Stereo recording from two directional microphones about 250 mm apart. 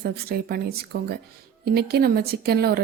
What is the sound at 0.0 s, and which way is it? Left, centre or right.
A woman's voice, right.